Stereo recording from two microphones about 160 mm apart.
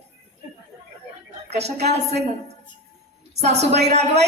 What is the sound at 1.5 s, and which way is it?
Speech, 45° right (ahead or behind).